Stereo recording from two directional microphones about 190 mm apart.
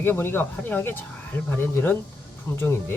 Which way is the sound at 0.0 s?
10° left (ahead or behind).